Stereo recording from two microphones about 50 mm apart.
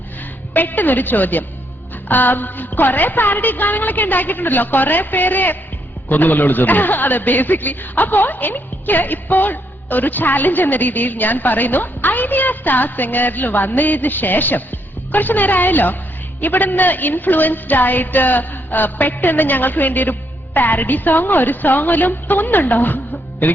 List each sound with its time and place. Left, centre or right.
0.5 s a man's voice: left